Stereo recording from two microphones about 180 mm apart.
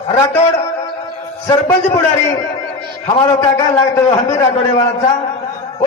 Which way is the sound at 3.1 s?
20° left (ahead or behind).